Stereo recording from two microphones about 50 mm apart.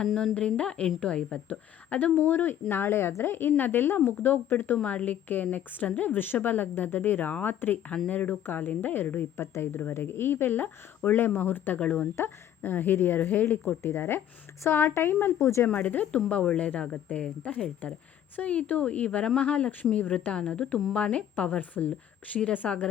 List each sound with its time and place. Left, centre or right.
0.0 s a woman's voice: centre
0.3 s speech: left
2.1 s speech: left
4.8 s a woman's voice: left
11.8 s speech: left
12.1 s a woman's voice: left
13.8 s speech: left
15.4 s a woman's voice: left
15.7 s a woman's voice: left
16.1 s a woman's voice: left
22.6 s a woman's voice: centre